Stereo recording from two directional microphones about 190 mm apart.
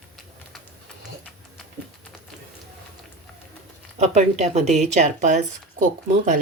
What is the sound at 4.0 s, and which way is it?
Speech, 35° right (ahead or behind).